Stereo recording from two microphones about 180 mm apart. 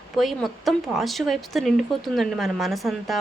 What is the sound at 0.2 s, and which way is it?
Speech, centre (ahead or behind).